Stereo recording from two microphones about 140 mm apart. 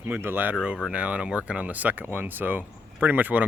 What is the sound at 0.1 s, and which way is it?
Speech, 15° right (ahead or behind).